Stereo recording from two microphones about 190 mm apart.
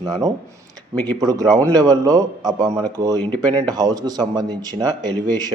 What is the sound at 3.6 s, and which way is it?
Speech, 20° right (ahead or behind).